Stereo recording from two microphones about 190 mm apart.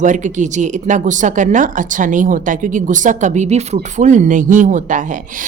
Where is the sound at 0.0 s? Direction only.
40° right (ahead or behind).